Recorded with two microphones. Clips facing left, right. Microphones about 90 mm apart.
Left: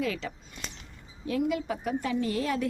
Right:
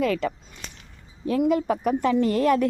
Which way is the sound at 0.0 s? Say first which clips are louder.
Right 8 dB; 50° right (ahead or behind).